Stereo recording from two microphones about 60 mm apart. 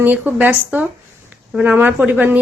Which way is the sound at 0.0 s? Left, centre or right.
Right.